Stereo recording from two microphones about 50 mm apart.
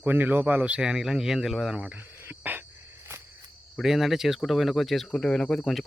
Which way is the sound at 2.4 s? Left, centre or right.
Right.